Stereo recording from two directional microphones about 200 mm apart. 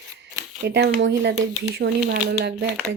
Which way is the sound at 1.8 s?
50° right (ahead or behind).